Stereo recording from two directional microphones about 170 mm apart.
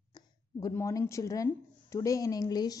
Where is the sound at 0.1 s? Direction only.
20° left (ahead or behind).